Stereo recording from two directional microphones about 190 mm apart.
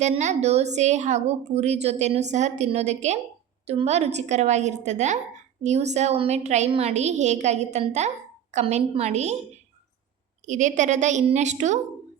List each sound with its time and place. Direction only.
0.0 s a woman's voice: 40° right (ahead or behind)
10.4 s a woman's voice: 40° right (ahead or behind)